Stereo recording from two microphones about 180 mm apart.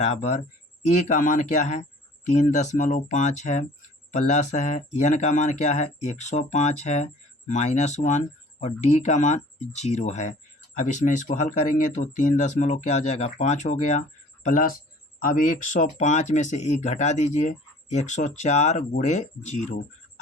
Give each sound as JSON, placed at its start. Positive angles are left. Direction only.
{"t": 0.0, "sound": "speech", "side_deg": 40}